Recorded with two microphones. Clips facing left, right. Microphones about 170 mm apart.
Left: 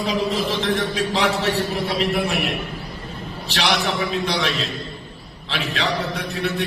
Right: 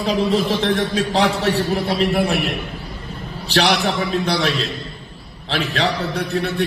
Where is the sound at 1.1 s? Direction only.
30° right (ahead or behind).